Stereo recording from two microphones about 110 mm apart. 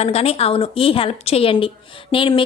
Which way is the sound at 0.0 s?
70° left (ahead or behind).